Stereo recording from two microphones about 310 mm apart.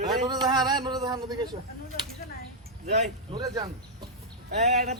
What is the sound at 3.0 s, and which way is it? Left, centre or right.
Speech, centre.